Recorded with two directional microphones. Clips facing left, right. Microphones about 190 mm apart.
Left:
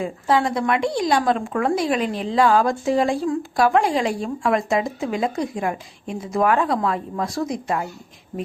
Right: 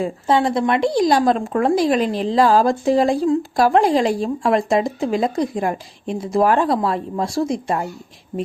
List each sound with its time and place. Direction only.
0.0 s speech: 30° right (ahead or behind)